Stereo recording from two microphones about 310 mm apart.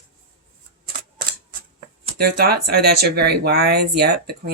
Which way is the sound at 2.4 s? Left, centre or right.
Right.